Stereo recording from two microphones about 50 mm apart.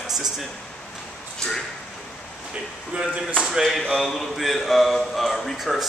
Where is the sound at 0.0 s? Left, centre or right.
Centre.